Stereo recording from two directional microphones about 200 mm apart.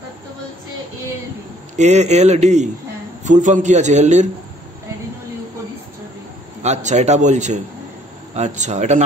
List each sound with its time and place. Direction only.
1.8 s a man's voice: 35° right (ahead or behind)
6.6 s a man's voice: 35° right (ahead or behind)